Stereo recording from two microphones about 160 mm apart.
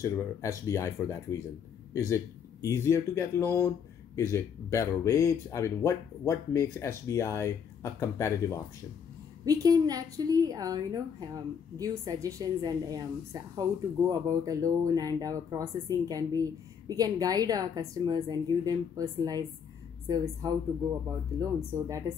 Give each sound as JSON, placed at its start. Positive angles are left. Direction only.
{"t": 0.0, "sound": "speech", "side_deg": 20}
{"t": 9.4, "sound": "a woman's voice", "side_deg": -20}